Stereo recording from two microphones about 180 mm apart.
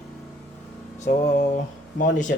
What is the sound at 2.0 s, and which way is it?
Speech, 45° left (ahead or behind).